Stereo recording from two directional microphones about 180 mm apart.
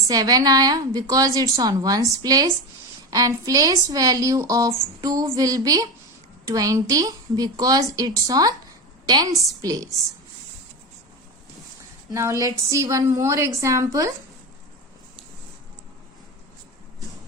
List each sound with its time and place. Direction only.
0.1 s a woman's voice: 20° right (ahead or behind)
12.1 s a woman's voice: 15° right (ahead or behind)